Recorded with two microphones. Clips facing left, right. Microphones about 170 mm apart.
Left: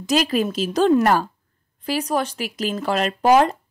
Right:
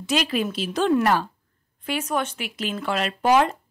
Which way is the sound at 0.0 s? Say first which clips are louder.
Left 4 dB; 40° left (ahead or behind).